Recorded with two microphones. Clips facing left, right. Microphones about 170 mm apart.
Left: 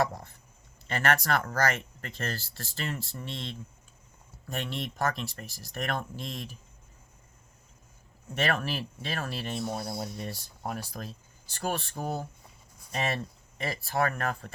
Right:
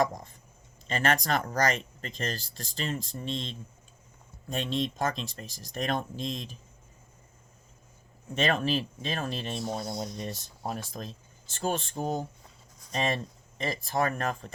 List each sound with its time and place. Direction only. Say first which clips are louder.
0.0 s a man's voice: right 1 dB; 15° right (ahead or behind)
8.4 s speech: right 3 dB; 20° right (ahead or behind)